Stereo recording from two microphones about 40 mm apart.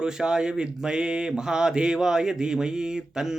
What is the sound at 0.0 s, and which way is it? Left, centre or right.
Speech, centre.